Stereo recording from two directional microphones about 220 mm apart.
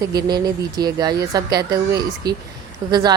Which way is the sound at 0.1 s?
20° right (ahead or behind).